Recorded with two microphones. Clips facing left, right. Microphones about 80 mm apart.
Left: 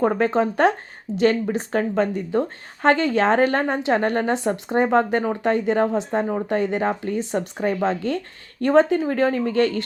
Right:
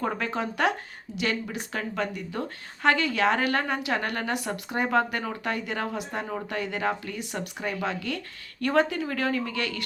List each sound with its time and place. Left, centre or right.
0.0 s speech: left